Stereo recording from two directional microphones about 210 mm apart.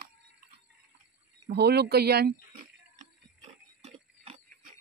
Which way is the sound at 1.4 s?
50° right (ahead or behind).